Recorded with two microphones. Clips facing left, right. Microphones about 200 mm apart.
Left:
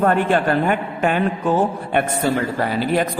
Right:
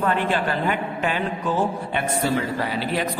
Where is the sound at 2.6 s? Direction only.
50° left (ahead or behind).